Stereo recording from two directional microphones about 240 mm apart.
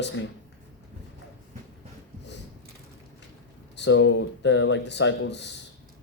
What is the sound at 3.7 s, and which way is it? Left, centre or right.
A man's voice, left.